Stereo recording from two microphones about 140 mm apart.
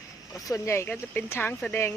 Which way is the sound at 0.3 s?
25° left (ahead or behind).